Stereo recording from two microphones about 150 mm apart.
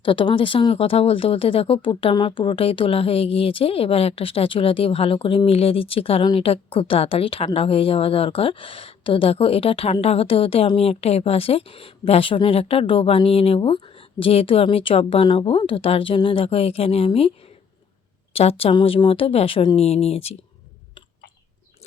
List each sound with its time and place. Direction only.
0.0 s speech: 35° left (ahead or behind)
18.3 s speech: 40° left (ahead or behind)